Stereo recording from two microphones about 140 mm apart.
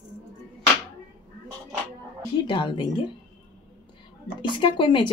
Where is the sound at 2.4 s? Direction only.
35° left (ahead or behind).